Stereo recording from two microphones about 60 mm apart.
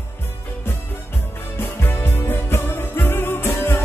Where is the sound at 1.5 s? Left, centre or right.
Left.